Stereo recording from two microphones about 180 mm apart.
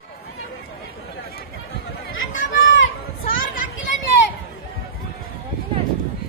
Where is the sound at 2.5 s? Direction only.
90° left.